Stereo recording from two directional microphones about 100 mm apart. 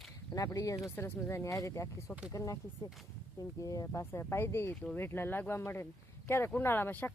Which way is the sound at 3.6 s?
30° left (ahead or behind).